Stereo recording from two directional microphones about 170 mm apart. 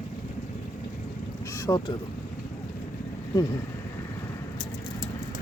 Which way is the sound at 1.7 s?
20° left (ahead or behind).